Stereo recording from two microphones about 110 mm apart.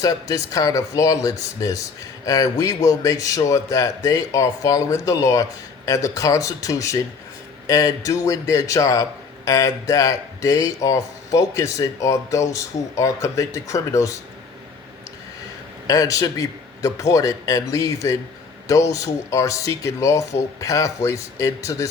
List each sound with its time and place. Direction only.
0.0 s a man's voice: 35° left (ahead or behind)
15.9 s a man's voice: 30° left (ahead or behind)